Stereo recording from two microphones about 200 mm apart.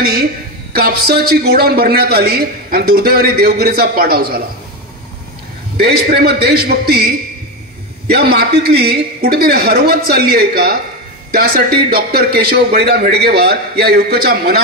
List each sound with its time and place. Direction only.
0.0 s a man's voice: 50° right (ahead or behind)
5.8 s a man's voice: 55° right (ahead or behind)
11.9 s a man's voice: 50° right (ahead or behind)